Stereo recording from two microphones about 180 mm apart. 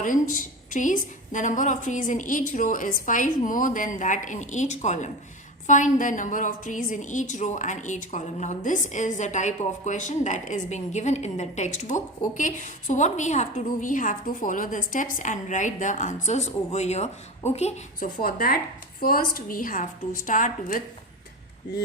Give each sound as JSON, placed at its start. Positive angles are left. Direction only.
{"t": 0.0, "sound": "a woman's voice", "side_deg": 45}
{"t": 18.2, "sound": "a woman's voice", "side_deg": 55}